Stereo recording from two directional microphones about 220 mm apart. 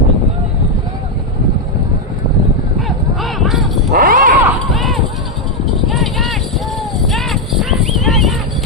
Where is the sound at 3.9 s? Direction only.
40° right (ahead or behind).